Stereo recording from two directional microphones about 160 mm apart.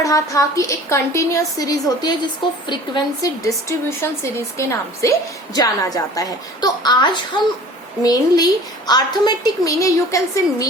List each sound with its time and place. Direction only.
0.0 s a woman's voice: 20° left (ahead or behind)